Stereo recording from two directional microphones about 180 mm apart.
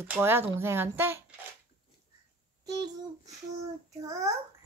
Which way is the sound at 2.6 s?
20° right (ahead or behind).